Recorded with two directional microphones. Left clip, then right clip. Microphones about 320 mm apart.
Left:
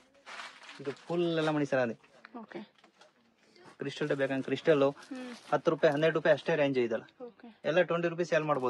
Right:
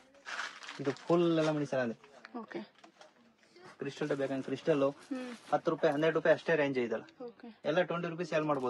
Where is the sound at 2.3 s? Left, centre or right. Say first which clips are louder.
Right 2 dB; centre.